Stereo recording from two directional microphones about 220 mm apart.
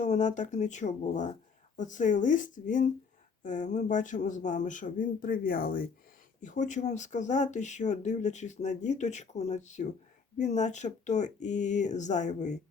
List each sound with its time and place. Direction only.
0.0 s speech: 35° left (ahead or behind)